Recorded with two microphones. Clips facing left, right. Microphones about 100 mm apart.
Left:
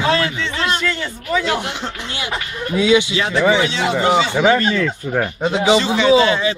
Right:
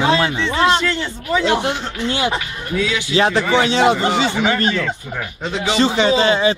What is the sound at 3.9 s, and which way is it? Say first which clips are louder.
Speech: left 2 dB; 55° left (ahead or behind).